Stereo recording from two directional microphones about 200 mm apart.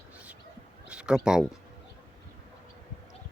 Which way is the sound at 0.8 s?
5° right (ahead or behind).